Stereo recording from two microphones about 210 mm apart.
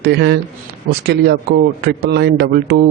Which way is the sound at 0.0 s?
55° right (ahead or behind).